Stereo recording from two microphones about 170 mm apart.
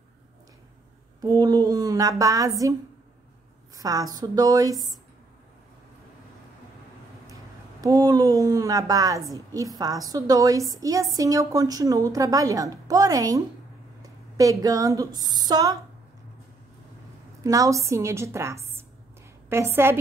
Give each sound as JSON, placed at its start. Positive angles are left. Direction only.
{"t": 1.4, "sound": "a woman's voice", "side_deg": -20}
{"t": 3.7, "sound": "a woman's voice", "side_deg": -20}
{"t": 7.8, "sound": "a woman's voice", "side_deg": -20}
{"t": 17.4, "sound": "a woman's voice", "side_deg": -20}